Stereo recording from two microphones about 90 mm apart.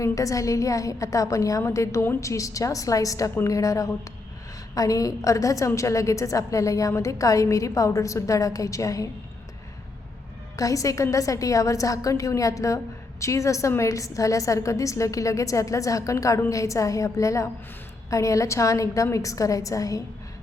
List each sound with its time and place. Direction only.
0.0 s a woman's voice: 35° left (ahead or behind)
10.6 s a woman's voice: 40° left (ahead or behind)